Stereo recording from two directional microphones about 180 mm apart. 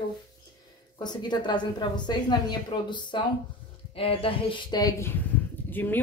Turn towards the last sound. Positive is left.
turn(degrees=10)  # may be behind; listen again after turning